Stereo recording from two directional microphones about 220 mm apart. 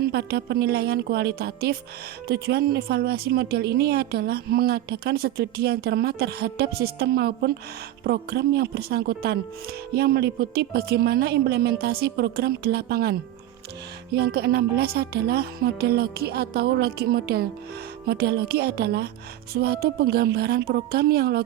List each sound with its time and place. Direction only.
0.1 s a woman's voice: 45° right (ahead or behind)